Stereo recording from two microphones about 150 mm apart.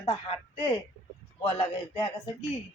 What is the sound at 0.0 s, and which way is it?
Speech, 30° left (ahead or behind).